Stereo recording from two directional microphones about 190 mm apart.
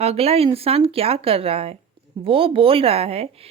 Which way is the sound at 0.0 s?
30° right (ahead or behind).